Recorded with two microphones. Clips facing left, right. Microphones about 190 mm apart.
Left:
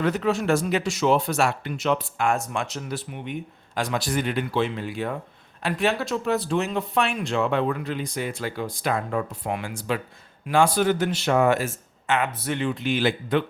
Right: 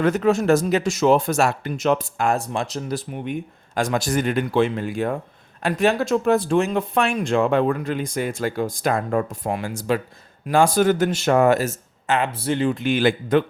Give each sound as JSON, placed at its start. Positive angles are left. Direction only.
{"t": 0.0, "sound": "speech", "side_deg": -45}
{"t": 12.7, "sound": "speech", "side_deg": -50}